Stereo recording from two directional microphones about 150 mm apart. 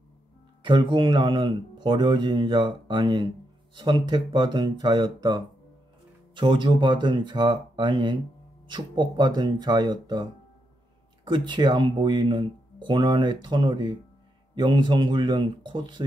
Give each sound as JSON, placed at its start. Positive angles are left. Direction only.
{"t": 0.6, "sound": "speech", "side_deg": -35}
{"t": 11.2, "sound": "speech", "side_deg": -30}